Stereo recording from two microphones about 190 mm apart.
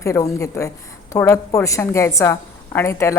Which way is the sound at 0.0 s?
15° left (ahead or behind).